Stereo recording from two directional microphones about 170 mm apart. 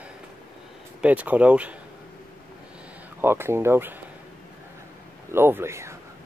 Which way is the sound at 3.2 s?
15° right (ahead or behind).